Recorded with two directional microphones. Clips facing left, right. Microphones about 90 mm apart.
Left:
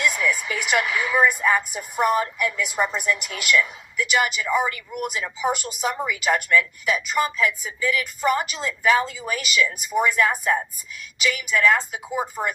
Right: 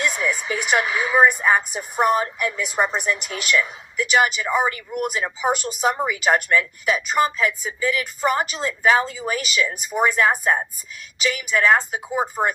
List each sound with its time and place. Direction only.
0.0 s a woman's voice: 30° right (ahead or behind)